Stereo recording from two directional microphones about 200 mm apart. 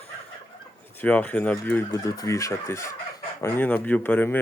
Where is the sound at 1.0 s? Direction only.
5° left (ahead or behind).